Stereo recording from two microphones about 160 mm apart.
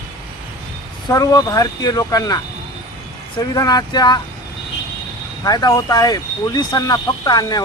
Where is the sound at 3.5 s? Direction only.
25° left (ahead or behind).